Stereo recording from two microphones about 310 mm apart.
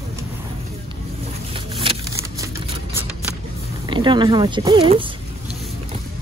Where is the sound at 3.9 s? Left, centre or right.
Centre.